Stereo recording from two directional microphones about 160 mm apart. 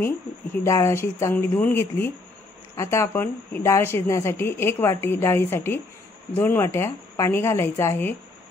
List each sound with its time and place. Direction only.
0.7 s a woman's voice: 20° left (ahead or behind)